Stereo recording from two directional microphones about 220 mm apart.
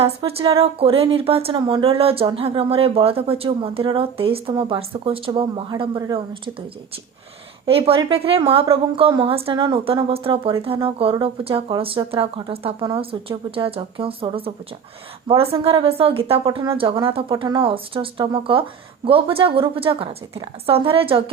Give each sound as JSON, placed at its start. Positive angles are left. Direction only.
{"t": 0.0, "sound": "speech", "side_deg": -25}
{"t": 7.6, "sound": "speech", "side_deg": -25}